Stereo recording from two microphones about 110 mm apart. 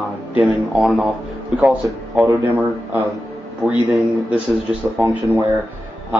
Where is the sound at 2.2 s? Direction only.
20° right (ahead or behind).